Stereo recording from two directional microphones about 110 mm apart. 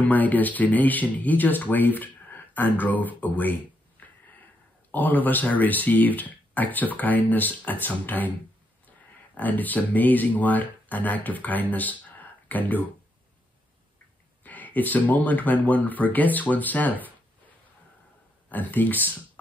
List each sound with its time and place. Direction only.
0.0 s speech: 15° left (ahead or behind)
4.0 s a sound: 15° left (ahead or behind)
4.9 s speech: 15° left (ahead or behind)
9.4 s speech: 15° left (ahead or behind)
14.4 s speech: 15° left (ahead or behind)
18.5 s speech: 15° left (ahead or behind)